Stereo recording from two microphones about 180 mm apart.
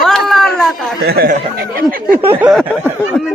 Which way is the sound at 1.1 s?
55° right (ahead or behind).